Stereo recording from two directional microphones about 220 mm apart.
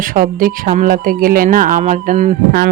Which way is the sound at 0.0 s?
40° right (ahead or behind).